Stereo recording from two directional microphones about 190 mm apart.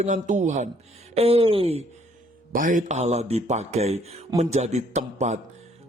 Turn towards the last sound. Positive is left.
turn(degrees=-35)  # may be behind; listen again after turning